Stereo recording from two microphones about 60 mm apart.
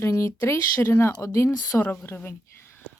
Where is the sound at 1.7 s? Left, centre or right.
Left.